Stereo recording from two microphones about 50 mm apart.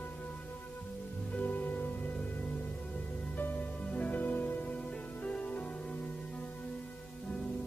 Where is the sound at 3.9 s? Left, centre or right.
Left.